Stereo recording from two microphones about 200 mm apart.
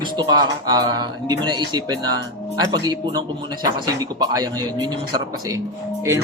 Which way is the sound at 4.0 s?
20° right (ahead or behind).